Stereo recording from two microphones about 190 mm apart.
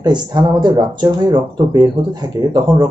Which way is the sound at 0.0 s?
20° right (ahead or behind).